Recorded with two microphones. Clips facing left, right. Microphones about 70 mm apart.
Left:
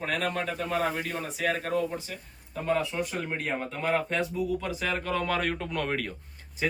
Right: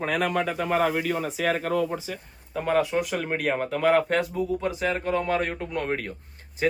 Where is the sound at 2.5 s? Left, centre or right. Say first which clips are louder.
Right 5 dB; right.